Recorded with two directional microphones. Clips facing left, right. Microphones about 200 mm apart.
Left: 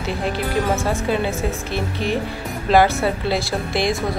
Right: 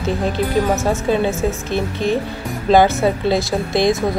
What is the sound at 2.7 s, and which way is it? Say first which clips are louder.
Speech: right 3 dB; 20° right (ahead or behind).